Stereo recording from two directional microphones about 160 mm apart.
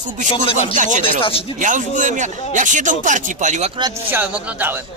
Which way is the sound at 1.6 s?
55° right (ahead or behind).